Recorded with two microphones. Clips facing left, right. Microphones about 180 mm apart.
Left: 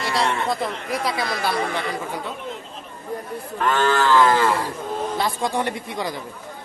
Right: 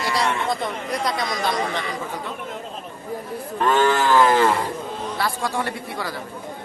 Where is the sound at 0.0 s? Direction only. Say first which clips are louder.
Even; centre (ahead or behind).